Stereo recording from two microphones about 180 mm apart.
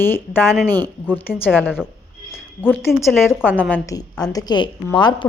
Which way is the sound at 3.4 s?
10° right (ahead or behind).